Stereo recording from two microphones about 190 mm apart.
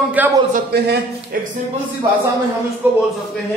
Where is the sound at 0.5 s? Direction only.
60° right (ahead or behind).